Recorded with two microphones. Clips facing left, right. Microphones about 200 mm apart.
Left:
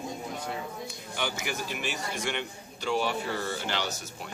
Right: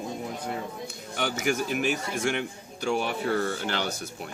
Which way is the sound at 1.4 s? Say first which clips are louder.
Right 8 dB; 50° right (ahead or behind).